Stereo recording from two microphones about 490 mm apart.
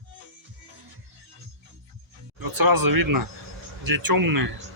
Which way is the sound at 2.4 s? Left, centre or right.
Right.